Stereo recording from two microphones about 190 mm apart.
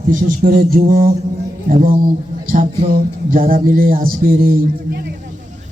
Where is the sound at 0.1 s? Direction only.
45° right (ahead or behind).